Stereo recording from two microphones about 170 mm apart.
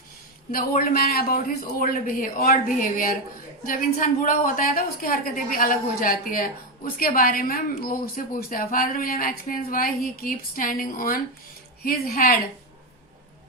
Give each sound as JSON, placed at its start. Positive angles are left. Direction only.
{"t": 0.5, "sound": "a woman's voice", "side_deg": 60}